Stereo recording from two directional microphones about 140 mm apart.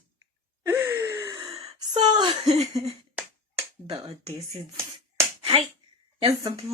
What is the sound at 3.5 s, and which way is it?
Finger snapping, 45° right (ahead or behind).